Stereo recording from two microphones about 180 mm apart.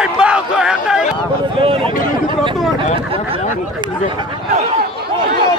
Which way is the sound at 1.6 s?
30° right (ahead or behind).